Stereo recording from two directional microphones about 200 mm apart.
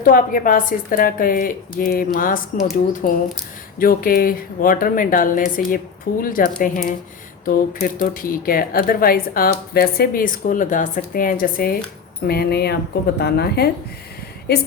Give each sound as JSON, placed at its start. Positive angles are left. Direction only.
{"t": 0.0, "sound": "speech", "side_deg": 45}